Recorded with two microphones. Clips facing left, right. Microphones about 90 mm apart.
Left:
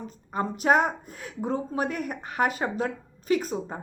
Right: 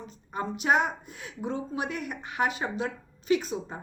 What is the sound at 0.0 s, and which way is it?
A woman's voice, 40° left (ahead or behind).